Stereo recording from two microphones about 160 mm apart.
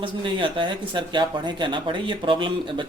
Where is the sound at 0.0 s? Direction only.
30° right (ahead or behind).